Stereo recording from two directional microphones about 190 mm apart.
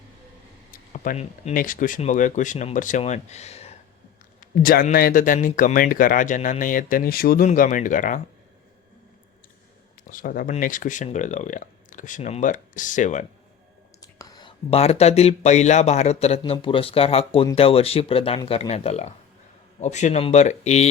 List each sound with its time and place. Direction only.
0.7 s speech: 45° left (ahead or behind)
4.4 s speech: 50° left (ahead or behind)
10.0 s speech: 45° left (ahead or behind)
14.0 s speech: 20° left (ahead or behind); by 20.9 s 35° left (ahead or behind)